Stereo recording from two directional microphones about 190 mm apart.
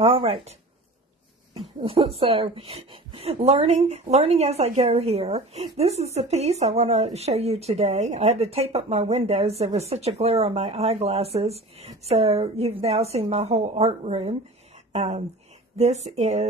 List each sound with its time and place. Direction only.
0.0 s a woman's voice: 30° right (ahead or behind)
1.8 s a woman's voice: 30° right (ahead or behind)